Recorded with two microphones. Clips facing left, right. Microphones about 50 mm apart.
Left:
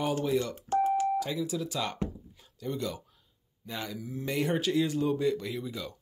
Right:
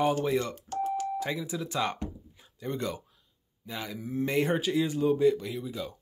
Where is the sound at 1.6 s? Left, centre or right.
Right.